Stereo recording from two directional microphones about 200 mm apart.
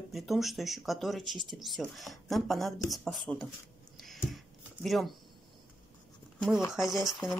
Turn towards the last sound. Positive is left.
turn(degrees=0)  # may be behind; listen again after turning